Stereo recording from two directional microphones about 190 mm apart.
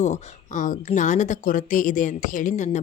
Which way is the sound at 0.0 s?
40° left (ahead or behind).